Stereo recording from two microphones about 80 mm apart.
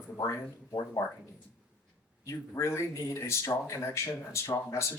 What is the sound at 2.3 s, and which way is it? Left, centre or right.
Speech, left.